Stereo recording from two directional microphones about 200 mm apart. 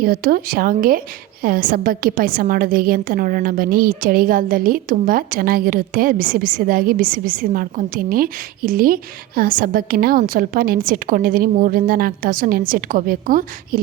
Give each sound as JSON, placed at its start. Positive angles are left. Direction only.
{"t": 0.0, "sound": "a woman's voice", "side_deg": -50}